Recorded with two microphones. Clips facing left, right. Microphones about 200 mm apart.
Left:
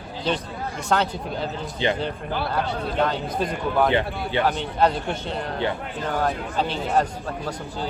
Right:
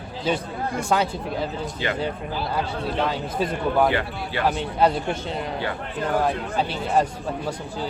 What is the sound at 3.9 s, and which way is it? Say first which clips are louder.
Speech: left 3 dB; 20° left (ahead or behind).